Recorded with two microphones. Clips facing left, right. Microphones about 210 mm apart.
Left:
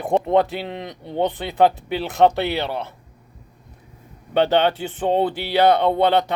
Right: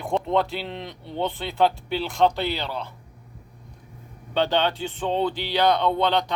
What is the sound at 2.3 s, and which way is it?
Speech, 65° left (ahead or behind).